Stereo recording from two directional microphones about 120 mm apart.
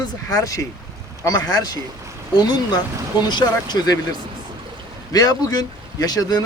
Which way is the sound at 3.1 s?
35° left (ahead or behind).